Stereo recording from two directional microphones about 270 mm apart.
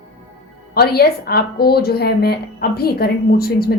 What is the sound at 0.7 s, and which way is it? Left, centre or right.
A woman's voice, left.